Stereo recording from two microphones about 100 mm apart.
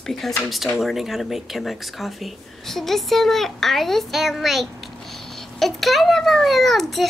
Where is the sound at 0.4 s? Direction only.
Centre (ahead or behind).